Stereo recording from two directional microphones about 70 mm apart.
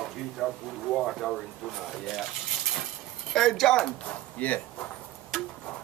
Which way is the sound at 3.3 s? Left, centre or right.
Centre.